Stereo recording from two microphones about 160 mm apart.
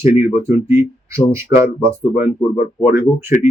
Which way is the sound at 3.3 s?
55° left (ahead or behind).